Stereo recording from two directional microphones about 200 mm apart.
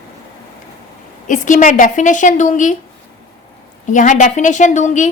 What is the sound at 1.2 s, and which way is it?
A woman's voice, 40° left (ahead or behind).